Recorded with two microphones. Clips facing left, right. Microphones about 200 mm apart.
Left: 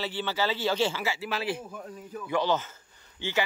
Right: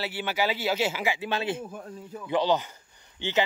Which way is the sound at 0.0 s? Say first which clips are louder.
Right 1 dB; 10° right (ahead or behind).